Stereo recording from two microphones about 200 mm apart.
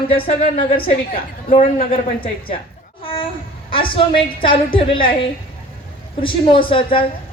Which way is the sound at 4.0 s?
25° left (ahead or behind).